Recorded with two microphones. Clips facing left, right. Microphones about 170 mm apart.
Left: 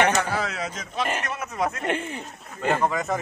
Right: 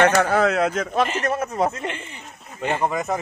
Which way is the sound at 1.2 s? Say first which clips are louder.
Right 6 dB; 40° right (ahead or behind).